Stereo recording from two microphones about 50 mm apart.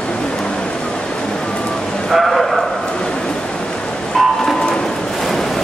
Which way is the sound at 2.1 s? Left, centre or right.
Centre.